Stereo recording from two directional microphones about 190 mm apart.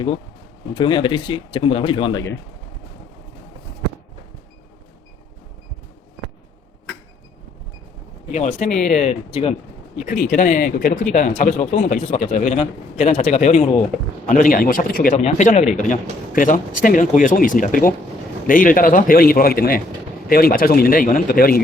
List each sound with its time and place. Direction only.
0.7 s speech: 25° left (ahead or behind)
8.3 s speech: 35° left (ahead or behind)
8.7 s speech: 5° left (ahead or behind)
9.4 s speech: 35° left (ahead or behind); by 21.6 s 50° left (ahead or behind)